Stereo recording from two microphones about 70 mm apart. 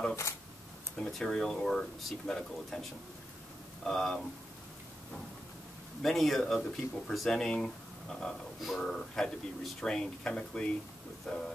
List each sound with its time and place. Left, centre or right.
0.9 s speech: centre
6.0 s speech: centre